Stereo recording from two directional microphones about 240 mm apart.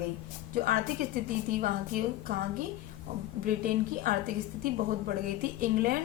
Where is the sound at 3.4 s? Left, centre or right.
Right.